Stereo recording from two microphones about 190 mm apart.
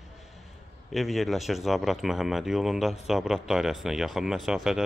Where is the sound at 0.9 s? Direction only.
Centre (ahead or behind).